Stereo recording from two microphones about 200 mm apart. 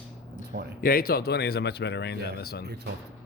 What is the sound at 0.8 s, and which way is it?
Speech, 45° left (ahead or behind).